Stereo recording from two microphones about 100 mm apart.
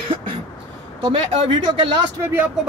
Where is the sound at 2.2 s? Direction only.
20° right (ahead or behind).